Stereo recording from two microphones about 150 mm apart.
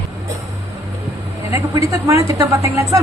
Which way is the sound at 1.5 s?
20° right (ahead or behind).